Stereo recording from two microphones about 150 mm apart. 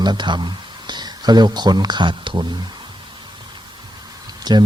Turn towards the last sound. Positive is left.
turn(degrees=-25)  # may be behind; listen again after turning